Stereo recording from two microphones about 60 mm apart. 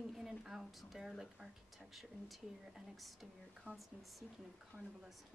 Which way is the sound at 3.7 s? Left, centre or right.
Left.